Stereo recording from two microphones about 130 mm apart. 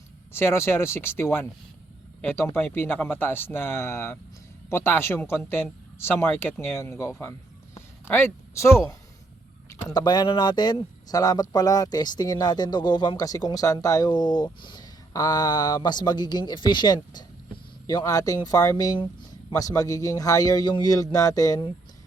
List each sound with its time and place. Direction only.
0.3 s a man's voice: 20° left (ahead or behind)
9.9 s a man's voice: 35° left (ahead or behind)